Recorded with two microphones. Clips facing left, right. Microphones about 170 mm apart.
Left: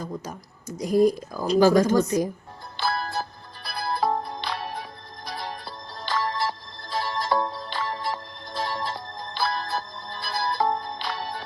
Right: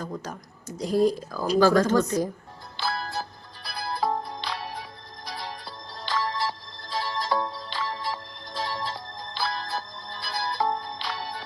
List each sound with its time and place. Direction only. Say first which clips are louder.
0.8 s speech: left 2 dB; 10° left (ahead or behind)
2.7 s music: left 3 dB; 55° left (ahead or behind)